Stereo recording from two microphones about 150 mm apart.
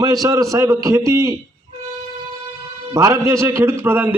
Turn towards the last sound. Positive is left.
turn(degrees=-15)  # may be behind; listen again after turning